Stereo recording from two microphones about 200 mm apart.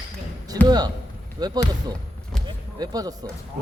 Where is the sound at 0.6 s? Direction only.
20° right (ahead or behind).